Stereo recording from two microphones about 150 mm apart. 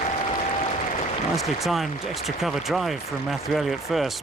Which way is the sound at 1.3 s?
Centre (ahead or behind).